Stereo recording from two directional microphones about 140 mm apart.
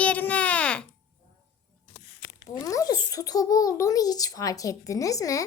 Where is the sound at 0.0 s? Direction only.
10° left (ahead or behind).